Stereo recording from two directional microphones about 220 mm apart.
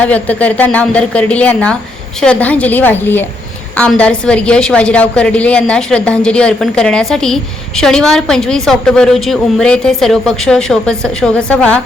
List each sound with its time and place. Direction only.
0.0 s a woman's voice: 5° left (ahead or behind)